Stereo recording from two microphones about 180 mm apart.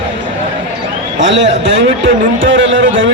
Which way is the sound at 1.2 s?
90° right.